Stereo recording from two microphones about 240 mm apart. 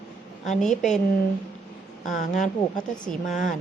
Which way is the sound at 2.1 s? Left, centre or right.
Left.